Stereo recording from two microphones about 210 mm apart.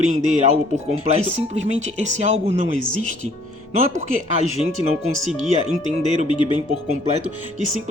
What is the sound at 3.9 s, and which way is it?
Speech, 30° right (ahead or behind).